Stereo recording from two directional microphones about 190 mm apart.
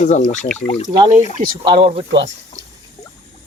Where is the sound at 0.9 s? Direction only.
20° right (ahead or behind).